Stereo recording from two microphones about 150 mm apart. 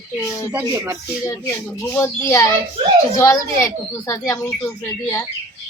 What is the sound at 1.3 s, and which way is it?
Speech, 20° left (ahead or behind).